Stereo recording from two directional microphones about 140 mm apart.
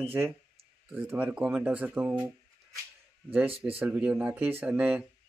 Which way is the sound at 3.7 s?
10° right (ahead or behind).